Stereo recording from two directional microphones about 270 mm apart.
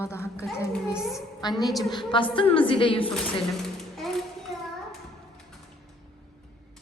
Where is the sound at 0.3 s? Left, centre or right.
Centre.